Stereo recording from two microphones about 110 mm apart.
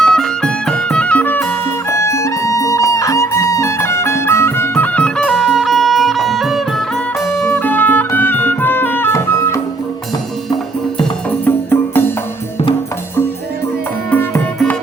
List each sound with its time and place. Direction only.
0.0 s music: 5° left (ahead or behind)
1.9 s music: 25° left (ahead or behind); by 7.5 s centre (ahead or behind)
7.5 s music: 15° left (ahead or behind)
11.3 s music: 15° left (ahead or behind)
14.1 s music: 20° left (ahead or behind)